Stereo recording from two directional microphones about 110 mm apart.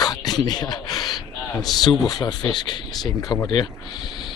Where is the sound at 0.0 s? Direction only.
40° left (ahead or behind).